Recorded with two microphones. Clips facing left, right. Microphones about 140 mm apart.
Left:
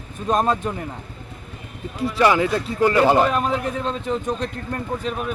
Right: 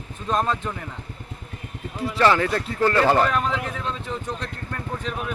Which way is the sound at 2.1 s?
15° left (ahead or behind).